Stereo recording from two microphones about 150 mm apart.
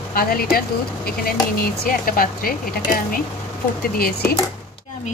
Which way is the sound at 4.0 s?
90° left.